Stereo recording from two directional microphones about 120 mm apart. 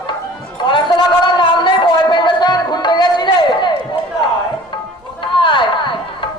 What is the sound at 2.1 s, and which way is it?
Music, 40° left (ahead or behind).